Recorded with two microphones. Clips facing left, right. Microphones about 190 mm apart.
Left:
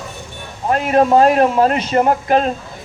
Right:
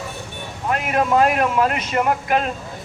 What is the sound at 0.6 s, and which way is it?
A man's voice, 35° left (ahead or behind).